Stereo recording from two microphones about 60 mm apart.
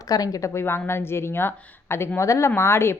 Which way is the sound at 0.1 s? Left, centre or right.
Left.